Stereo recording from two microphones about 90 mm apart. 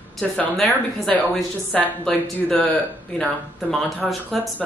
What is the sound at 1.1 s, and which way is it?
Speech, 5° left (ahead or behind).